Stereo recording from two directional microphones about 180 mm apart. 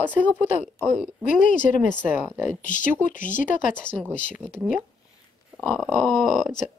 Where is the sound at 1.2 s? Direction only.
45° left (ahead or behind).